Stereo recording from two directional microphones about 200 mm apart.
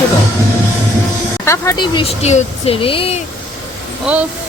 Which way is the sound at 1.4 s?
15° left (ahead or behind).